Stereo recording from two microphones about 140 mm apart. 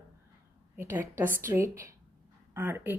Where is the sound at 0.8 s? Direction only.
15° right (ahead or behind).